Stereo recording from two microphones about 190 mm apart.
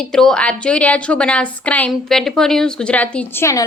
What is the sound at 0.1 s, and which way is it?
A woman's voice, centre (ahead or behind).